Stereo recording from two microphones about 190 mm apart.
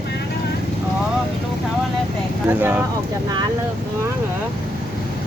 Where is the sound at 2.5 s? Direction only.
10° right (ahead or behind).